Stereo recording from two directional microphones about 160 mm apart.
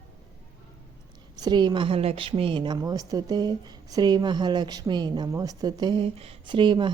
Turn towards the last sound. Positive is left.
turn(degrees=-30)  # may be behind; listen again after turning